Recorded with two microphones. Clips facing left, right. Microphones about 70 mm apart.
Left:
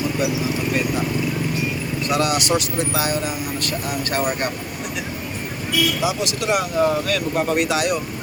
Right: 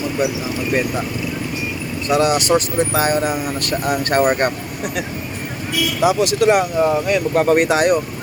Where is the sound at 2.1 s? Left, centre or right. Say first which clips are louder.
Right 5 dB; right.